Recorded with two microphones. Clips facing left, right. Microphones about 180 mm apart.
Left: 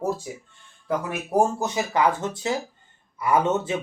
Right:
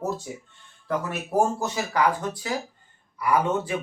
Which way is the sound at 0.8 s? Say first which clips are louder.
Left 1 dB; 15° left (ahead or behind).